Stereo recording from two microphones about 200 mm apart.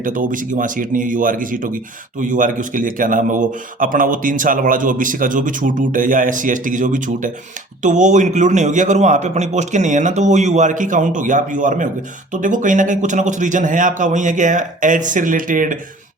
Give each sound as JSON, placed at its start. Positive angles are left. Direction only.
{"t": 0.0, "sound": "speech", "side_deg": -40}